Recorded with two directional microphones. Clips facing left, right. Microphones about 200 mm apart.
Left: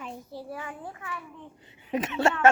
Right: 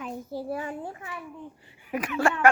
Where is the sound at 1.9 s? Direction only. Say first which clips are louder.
Even; 25° left (ahead or behind).